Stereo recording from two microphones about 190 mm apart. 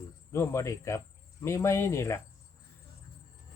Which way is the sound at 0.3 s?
15° left (ahead or behind).